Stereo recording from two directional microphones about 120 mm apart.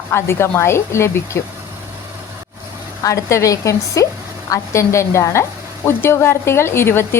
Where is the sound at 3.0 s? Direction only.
25° left (ahead or behind).